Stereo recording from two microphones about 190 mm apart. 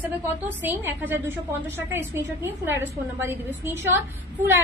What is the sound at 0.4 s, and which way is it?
A woman's voice, 10° right (ahead or behind).